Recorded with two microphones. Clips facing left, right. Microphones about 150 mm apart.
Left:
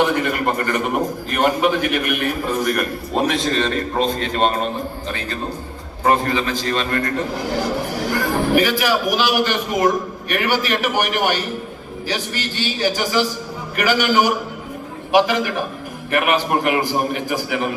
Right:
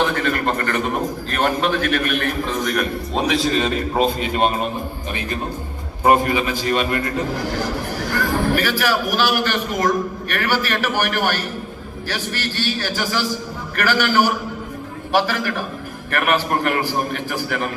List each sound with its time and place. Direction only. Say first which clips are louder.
0.0 s a man's voice: left 2 dB; 15° left (ahead or behind); by 4.7 s 10° right (ahead or behind)
6.0 s a man's voice: right 2 dB; 15° right (ahead or behind)
8.1 s a man's voice: left 2 dB; 15° left (ahead or behind)